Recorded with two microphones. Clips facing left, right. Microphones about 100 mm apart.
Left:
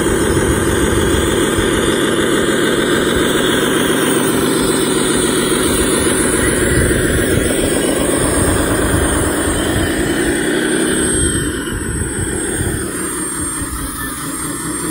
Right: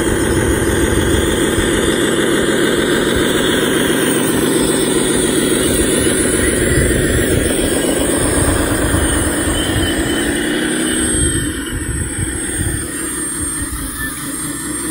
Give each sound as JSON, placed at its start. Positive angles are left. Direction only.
{"t": 0.0, "sound": "vehicle", "side_deg": 20}
{"t": 8.4, "sound": "vehicle", "side_deg": 0}
{"t": 9.0, "sound": "vehicle", "side_deg": 15}